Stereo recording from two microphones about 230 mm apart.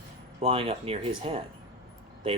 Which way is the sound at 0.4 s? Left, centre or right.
Right.